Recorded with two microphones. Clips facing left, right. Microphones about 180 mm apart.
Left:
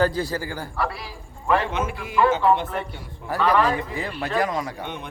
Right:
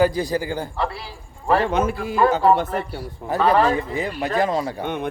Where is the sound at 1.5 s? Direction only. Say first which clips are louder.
Right 4 dB; 40° right (ahead or behind).